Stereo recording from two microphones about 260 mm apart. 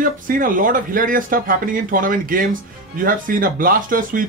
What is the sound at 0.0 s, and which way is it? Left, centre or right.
Speech, right.